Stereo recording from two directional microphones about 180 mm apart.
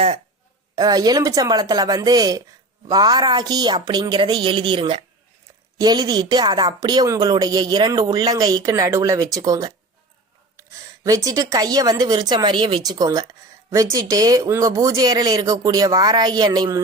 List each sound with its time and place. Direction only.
0.8 s a woman's voice: 20° right (ahead or behind)